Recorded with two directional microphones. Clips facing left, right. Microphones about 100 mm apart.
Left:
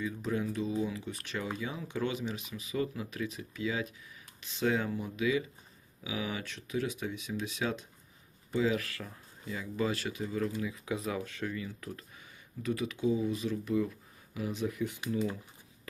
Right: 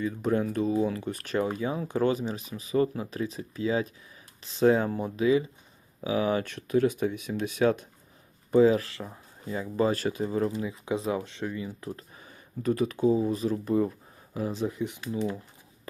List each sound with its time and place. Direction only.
0.0 s speech: 50° right (ahead or behind); by 9.6 s 25° right (ahead or behind)
9.6 s speech: 40° right (ahead or behind)
12.6 s speech: 45° right (ahead or behind); by 15.0 s 20° right (ahead or behind)